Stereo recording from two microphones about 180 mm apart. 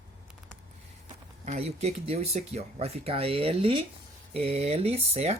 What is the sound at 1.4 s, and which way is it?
Speech, 40° right (ahead or behind).